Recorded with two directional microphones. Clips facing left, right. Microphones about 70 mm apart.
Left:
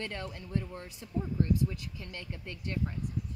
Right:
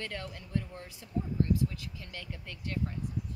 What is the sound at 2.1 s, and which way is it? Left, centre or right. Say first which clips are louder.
Speech: left 2 dB; left.